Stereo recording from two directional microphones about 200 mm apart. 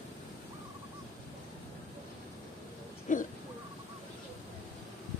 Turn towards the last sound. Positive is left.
turn(degrees=40)  # may be behind; listen again after turning